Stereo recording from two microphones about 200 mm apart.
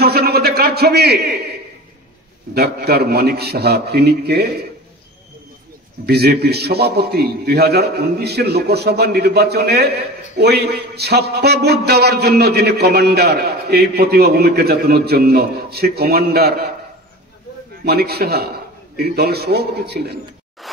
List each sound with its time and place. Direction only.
0.0 s a sound: 50° right (ahead or behind)
2.5 s a man's voice: 50° right (ahead or behind)
6.0 s a man's voice: 55° right (ahead or behind)
17.8 s a man's voice: 50° right (ahead or behind)
20.6 s zipper: centre (ahead or behind)